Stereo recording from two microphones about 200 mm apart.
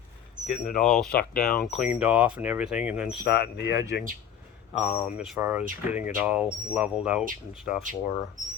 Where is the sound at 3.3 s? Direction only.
55° left (ahead or behind).